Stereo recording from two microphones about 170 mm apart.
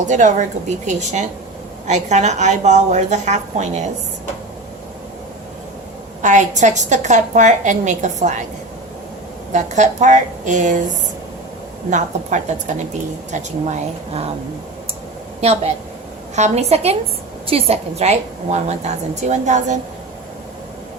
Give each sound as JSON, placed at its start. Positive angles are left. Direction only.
{"t": 0.0, "sound": "a woman's voice", "side_deg": -45}
{"t": 6.2, "sound": "a woman's voice", "side_deg": -45}
{"t": 9.5, "sound": "a woman's voice", "side_deg": -45}
{"t": 11.9, "sound": "a woman's voice", "side_deg": -45}
{"t": 15.4, "sound": "a woman's voice", "side_deg": -40}